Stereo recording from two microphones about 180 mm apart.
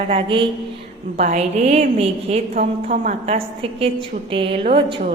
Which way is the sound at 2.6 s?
45° right (ahead or behind).